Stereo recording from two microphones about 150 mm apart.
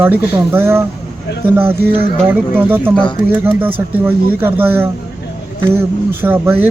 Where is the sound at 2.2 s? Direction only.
15° right (ahead or behind).